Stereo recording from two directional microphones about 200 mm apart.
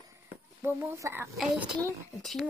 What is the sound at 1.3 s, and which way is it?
A child's voice, 5° right (ahead or behind).